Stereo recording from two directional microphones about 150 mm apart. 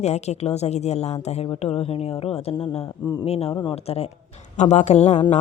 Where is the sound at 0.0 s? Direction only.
45° left (ahead or behind).